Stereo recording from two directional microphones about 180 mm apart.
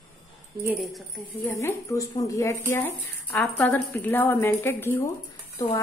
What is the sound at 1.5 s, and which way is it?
A woman's voice, 15° left (ahead or behind).